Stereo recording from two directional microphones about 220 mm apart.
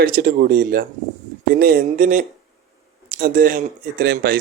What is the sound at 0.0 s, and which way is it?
A man's voice, 40° right (ahead or behind).